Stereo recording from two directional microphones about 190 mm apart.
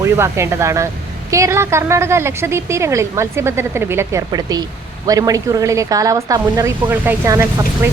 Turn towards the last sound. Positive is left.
turn(degrees=-15)  # may be behind; listen again after turning